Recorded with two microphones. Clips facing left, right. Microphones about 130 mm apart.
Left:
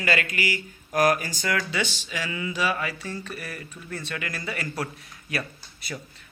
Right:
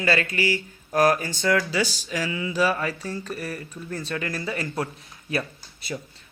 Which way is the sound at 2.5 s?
40° right (ahead or behind).